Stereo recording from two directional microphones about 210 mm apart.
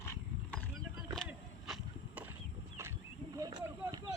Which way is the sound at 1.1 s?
Centre (ahead or behind).